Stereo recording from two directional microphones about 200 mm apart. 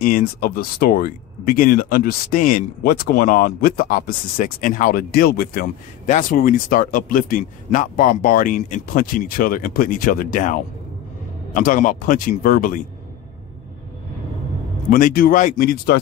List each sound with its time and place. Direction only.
0.0 s speech: 45° left (ahead or behind)
14.9 s speech: 45° left (ahead or behind)